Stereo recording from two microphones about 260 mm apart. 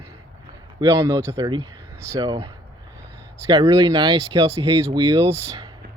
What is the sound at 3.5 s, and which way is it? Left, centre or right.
Speech, centre.